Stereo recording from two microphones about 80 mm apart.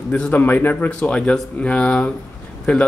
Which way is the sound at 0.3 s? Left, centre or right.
Left.